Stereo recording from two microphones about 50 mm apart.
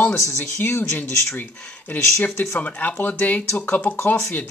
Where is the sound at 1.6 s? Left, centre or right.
Left.